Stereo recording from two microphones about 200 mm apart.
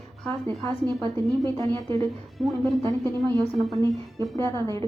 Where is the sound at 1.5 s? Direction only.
20° right (ahead or behind).